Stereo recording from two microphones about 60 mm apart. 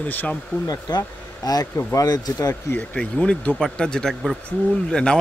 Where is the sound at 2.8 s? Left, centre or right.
Centre.